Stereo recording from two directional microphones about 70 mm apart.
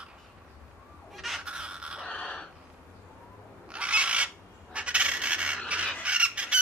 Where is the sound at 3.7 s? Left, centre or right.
Centre.